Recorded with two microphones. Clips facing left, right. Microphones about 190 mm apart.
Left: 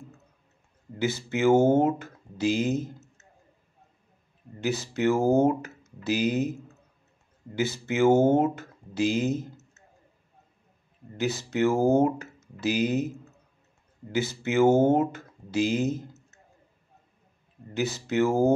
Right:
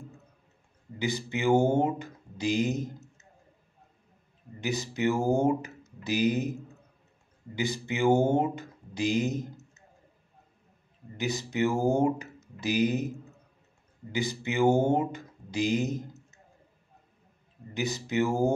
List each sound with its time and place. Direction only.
1.0 s speech: 15° right (ahead or behind)
4.6 s speech: 15° right (ahead or behind)
7.5 s speech: 15° right (ahead or behind)
11.1 s speech: 15° right (ahead or behind)
14.1 s speech: 15° right (ahead or behind)
15.1 s a sound: 15° right (ahead or behind)
17.7 s speech: 15° right (ahead or behind)